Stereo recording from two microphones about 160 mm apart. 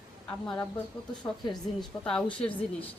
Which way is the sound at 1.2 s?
20° left (ahead or behind).